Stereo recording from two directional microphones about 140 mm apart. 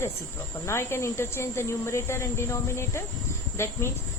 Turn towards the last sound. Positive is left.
turn(degrees=20)  # may be behind; listen again after turning